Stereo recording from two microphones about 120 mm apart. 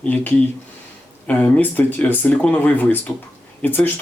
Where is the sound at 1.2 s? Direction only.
10° left (ahead or behind).